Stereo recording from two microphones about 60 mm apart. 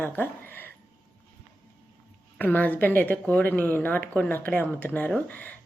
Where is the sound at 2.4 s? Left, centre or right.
Left.